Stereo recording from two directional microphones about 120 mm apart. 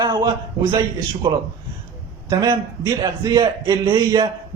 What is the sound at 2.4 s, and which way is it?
A man's voice, 30° right (ahead or behind).